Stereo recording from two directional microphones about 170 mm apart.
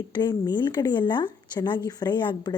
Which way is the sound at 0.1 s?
25° left (ahead or behind).